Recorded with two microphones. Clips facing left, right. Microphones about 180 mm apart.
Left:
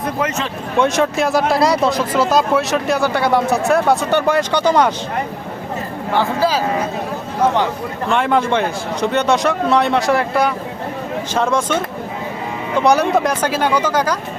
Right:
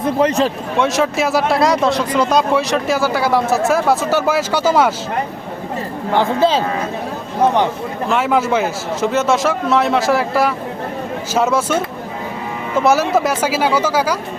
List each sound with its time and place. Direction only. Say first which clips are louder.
0.2 s a man's voice: right 9 dB; 35° right (ahead or behind)
0.8 s speech: left 1 dB; centre (ahead or behind)
6.1 s speech: right 2 dB; 20° right (ahead or behind)
8.0 s speech: even; 5° right (ahead or behind)
12.8 s speech: even; 5° right (ahead or behind)